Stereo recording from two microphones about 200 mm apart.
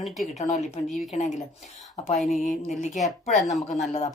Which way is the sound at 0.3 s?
35° left (ahead or behind).